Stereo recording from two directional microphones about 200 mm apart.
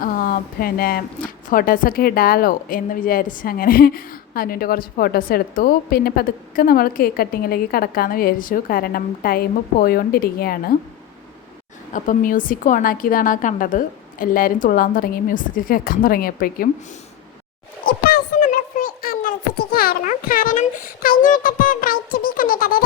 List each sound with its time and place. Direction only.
0.0 s a woman's voice: 45° left (ahead or behind)
11.9 s a woman's voice: 40° left (ahead or behind)
17.8 s a sound: 45° left (ahead or behind)